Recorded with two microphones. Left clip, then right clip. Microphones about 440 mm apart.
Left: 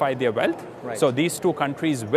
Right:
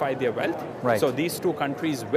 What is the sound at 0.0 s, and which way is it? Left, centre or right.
Speech, left.